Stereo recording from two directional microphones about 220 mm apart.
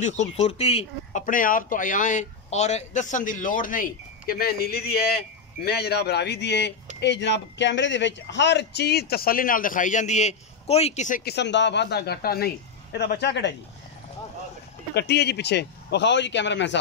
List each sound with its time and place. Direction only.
0.0 s speech: 30° left (ahead or behind); by 13.6 s 50° left (ahead or behind)
15.0 s speech: 50° left (ahead or behind)